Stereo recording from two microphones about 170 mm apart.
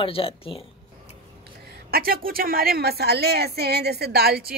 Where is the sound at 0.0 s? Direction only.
35° left (ahead or behind).